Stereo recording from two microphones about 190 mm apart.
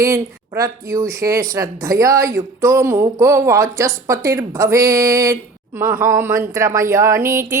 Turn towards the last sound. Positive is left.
turn(degrees=-15)  # may be behind; listen again after turning